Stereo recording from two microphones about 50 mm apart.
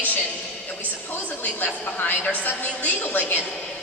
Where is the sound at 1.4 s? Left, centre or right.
Left.